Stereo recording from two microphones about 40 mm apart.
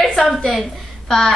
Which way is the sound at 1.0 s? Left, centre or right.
Centre.